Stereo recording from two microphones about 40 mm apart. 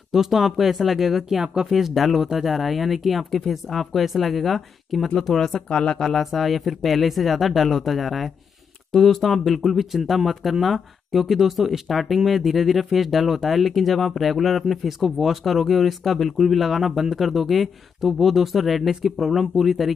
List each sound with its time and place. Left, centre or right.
0.1 s speech: centre
1.4 s speech: right
1.7 s speech: centre